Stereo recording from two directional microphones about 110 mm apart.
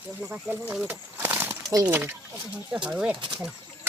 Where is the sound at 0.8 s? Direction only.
15° right (ahead or behind).